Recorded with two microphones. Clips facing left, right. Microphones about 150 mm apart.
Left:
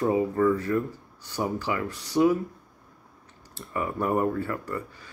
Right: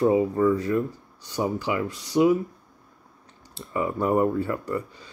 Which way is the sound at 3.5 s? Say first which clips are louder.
Right 3 dB; 20° right (ahead or behind).